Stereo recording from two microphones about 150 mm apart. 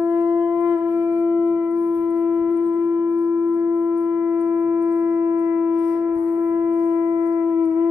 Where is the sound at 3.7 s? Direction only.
15° right (ahead or behind).